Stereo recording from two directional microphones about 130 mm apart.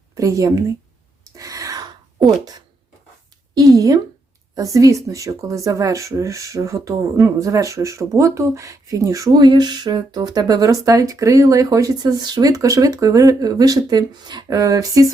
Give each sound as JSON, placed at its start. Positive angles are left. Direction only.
{"t": 0.1, "sound": "speech", "side_deg": -25}
{"t": 1.4, "sound": "gasp", "side_deg": -25}
{"t": 2.2, "sound": "speech", "side_deg": 0}
{"t": 3.5, "sound": "speech", "side_deg": -25}